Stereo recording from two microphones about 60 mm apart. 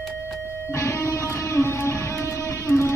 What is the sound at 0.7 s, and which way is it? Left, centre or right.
Music, left.